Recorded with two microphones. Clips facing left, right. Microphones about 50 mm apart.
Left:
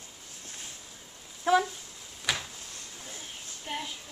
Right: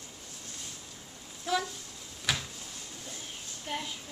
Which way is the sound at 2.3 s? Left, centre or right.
Centre.